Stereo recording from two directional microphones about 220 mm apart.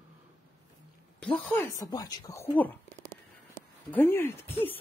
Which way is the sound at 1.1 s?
5° left (ahead or behind).